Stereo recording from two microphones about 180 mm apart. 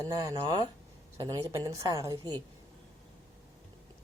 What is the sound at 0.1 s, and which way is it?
A woman's voice, 20° right (ahead or behind).